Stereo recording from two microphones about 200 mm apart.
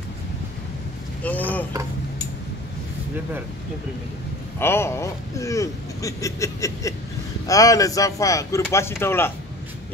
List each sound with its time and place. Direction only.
1.2 s boat: 10° left (ahead or behind)
4.6 s speech: 10° left (ahead or behind)